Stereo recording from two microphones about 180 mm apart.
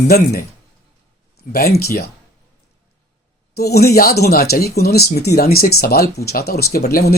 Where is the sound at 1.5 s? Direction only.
60° left (ahead or behind).